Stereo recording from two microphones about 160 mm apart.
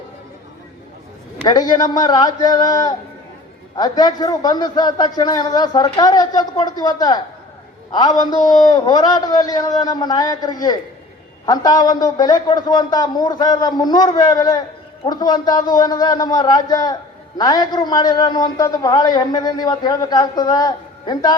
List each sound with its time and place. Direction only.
1.5 s a man's voice: 25° left (ahead or behind)